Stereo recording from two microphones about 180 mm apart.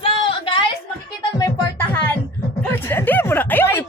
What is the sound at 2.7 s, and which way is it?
Speech, 10° left (ahead or behind).